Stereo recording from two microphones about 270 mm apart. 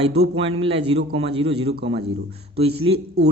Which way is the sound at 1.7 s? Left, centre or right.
Right.